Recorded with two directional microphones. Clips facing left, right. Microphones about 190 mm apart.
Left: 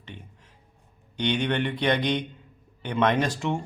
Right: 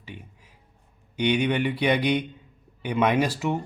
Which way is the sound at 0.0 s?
10° right (ahead or behind).